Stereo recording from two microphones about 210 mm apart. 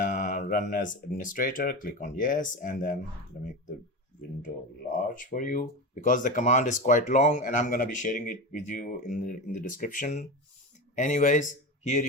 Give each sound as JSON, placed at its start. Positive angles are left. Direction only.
{"t": 0.0, "sound": "speech", "side_deg": 35}
{"t": 5.3, "sound": "speech", "side_deg": 40}